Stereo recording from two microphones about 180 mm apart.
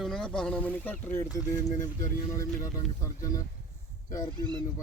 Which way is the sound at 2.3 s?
20° left (ahead or behind).